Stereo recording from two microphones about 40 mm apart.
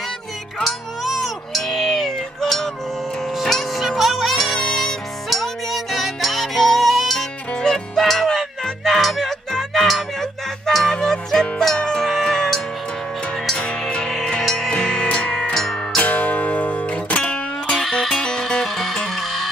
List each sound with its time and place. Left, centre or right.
0.7 s music: centre
7.6 s music: centre
8.0 s music: centre
10.8 s music: centre
12.1 s music: centre
13.6 s music: left
14.4 s music: centre
14.7 s music: centre
15.5 s music: centre
16.0 s music: left
17.8 s music: centre
18.2 s music: centre